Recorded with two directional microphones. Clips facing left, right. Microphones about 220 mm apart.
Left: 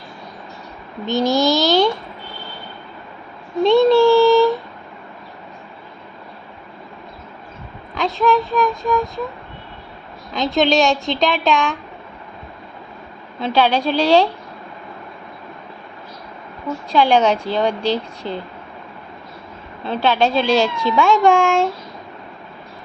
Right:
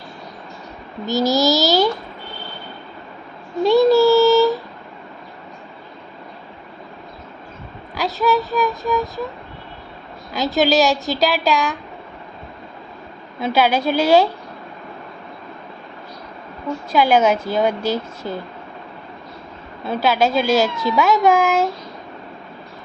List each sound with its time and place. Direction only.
1.0 s a woman's voice: 5° right (ahead or behind)
3.6 s child singing: 5° right (ahead or behind)
4.2 s a sound: 5° right (ahead or behind)
7.9 s a woman's voice: 5° right (ahead or behind)
10.3 s a woman's voice: 5° right (ahead or behind)
13.4 s a woman's voice: 10° right (ahead or behind)
16.6 s a woman's voice: 5° right (ahead or behind)
18.2 s speech: 20° left (ahead or behind)
19.9 s a woman's voice: 5° right (ahead or behind)